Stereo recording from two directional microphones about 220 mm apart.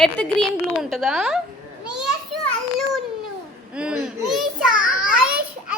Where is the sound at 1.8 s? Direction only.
5° right (ahead or behind).